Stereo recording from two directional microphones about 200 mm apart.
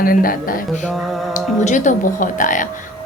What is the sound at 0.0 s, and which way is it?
Speech, 45° left (ahead or behind).